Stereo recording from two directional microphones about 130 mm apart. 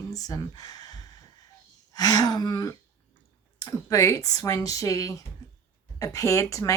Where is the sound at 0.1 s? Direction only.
30° left (ahead or behind).